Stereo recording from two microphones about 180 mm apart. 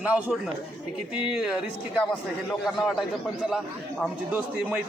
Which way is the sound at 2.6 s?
Centre (ahead or behind).